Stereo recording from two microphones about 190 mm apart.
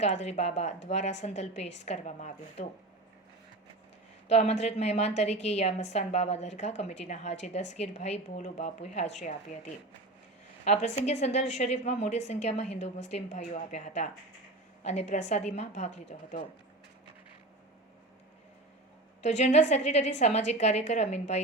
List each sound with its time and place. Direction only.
0.0 s a woman's voice: 35° left (ahead or behind)
4.3 s a woman's voice: 35° left (ahead or behind)
19.2 s a woman's voice: 35° left (ahead or behind)